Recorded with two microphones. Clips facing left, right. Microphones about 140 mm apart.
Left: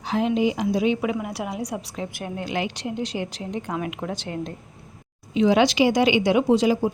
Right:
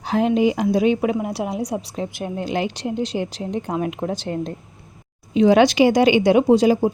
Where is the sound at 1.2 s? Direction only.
30° right (ahead or behind).